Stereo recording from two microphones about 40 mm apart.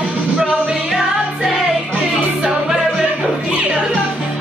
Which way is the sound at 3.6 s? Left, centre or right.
Right.